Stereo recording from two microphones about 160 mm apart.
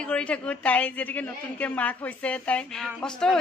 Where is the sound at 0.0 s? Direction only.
5° left (ahead or behind).